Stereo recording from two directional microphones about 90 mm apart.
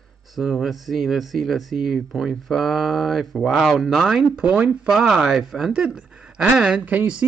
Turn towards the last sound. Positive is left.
turn(degrees=-15)  # may be behind; listen again after turning